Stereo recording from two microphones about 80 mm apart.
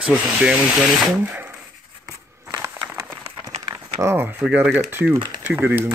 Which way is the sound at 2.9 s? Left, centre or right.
Right.